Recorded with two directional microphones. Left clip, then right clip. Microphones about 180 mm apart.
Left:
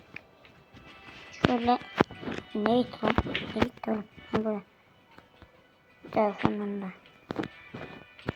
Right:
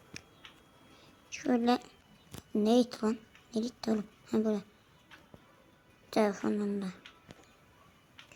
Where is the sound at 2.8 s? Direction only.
20° right (ahead or behind).